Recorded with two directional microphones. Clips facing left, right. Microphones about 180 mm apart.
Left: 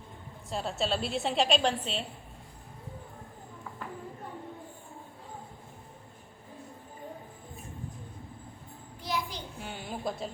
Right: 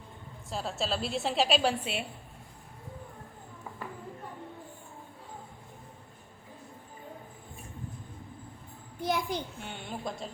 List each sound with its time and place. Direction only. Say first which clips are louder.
0.5 s a woman's voice: left 2 dB; centre (ahead or behind)
9.0 s a sound: right 4 dB; 50° right (ahead or behind)
9.6 s a woman's voice: left 1 dB; centre (ahead or behind)